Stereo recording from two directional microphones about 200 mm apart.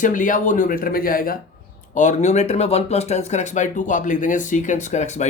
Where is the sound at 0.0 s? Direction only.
40° left (ahead or behind).